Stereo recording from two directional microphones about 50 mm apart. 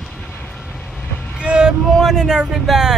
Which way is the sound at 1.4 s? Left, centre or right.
Right.